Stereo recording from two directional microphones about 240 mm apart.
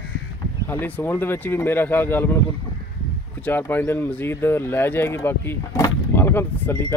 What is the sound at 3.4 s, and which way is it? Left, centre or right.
Speech, centre.